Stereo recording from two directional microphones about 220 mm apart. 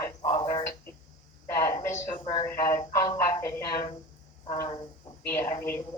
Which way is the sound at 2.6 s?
15° left (ahead or behind).